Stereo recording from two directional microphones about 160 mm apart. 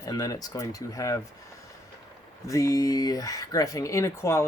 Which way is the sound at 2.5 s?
20° left (ahead or behind).